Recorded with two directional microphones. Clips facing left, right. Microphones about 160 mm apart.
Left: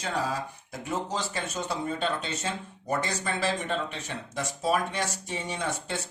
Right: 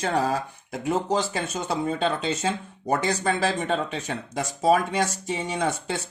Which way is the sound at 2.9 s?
90° right.